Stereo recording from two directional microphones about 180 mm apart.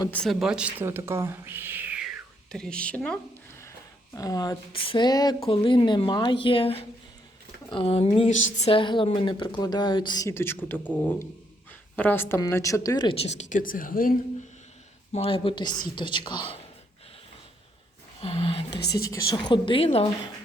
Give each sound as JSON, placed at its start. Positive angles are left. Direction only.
{"t": 0.1, "sound": "speech", "side_deg": 0}
{"t": 2.5, "sound": "speech", "side_deg": 5}
{"t": 11.9, "sound": "speech", "side_deg": 10}
{"t": 15.1, "sound": "speech", "side_deg": 30}
{"t": 18.2, "sound": "speech", "side_deg": 30}
{"t": 19.1, "sound": "speech", "side_deg": 20}